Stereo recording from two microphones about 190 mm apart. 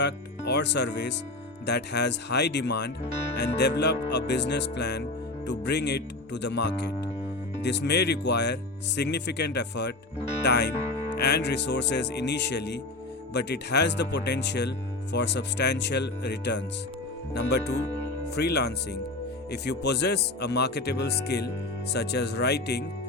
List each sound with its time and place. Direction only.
0.0 s speech: 65° left (ahead or behind)